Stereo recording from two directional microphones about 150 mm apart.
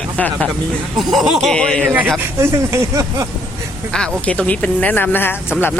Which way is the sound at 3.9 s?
10° left (ahead or behind).